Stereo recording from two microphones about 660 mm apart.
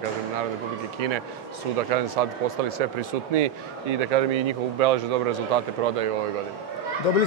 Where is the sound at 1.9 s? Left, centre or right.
Right.